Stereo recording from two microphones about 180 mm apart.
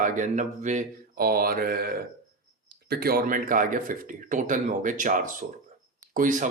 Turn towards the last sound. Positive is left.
turn(degrees=-45)  # may be behind; listen again after turning